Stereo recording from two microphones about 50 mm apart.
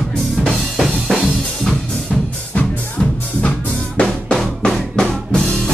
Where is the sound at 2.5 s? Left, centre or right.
Left.